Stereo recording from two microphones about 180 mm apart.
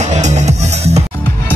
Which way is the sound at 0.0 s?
40° right (ahead or behind).